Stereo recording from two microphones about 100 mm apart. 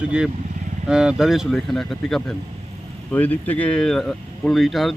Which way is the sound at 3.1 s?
15° left (ahead or behind).